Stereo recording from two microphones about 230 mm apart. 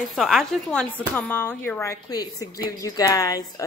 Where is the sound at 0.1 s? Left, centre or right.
Centre.